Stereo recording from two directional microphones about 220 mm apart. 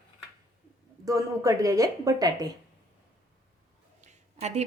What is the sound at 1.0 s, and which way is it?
Speech, 15° right (ahead or behind).